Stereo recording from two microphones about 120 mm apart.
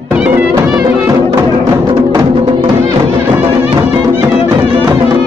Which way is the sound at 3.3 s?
20° right (ahead or behind).